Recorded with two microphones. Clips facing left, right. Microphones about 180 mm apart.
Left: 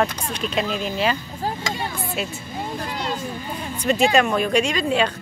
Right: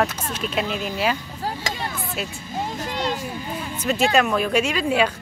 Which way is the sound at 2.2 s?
Centre (ahead or behind).